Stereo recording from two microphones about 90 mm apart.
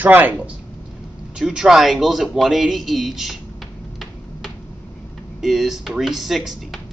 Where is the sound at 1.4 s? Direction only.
10° right (ahead or behind).